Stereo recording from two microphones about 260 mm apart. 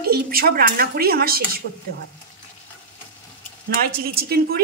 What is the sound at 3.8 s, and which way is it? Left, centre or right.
Speech, right.